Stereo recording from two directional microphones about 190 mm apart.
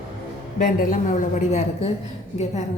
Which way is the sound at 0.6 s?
45° left (ahead or behind).